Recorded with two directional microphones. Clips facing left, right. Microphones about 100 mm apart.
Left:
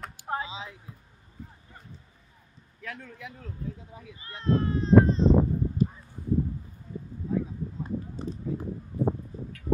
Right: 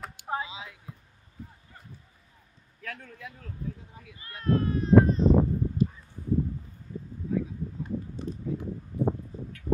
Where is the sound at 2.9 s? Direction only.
20° left (ahead or behind).